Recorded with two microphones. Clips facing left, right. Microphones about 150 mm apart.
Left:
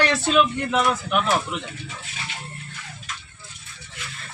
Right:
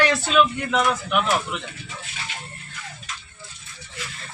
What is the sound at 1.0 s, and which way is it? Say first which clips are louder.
Speech: even; 40° left (ahead or behind).